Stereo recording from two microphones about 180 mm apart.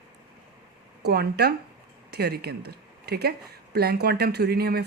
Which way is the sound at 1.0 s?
65° right (ahead or behind).